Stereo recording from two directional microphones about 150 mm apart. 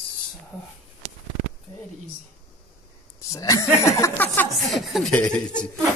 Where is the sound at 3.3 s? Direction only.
20° left (ahead or behind).